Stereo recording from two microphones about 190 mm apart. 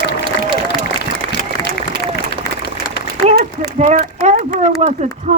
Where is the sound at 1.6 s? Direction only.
20° left (ahead or behind).